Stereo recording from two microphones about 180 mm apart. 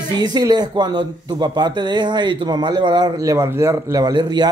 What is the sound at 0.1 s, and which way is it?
Speech, 20° right (ahead or behind).